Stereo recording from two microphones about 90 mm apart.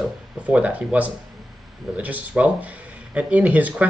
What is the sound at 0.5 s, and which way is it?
Speech, 15° right (ahead or behind).